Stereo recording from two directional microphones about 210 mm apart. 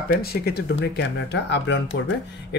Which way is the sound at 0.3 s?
50° left (ahead or behind).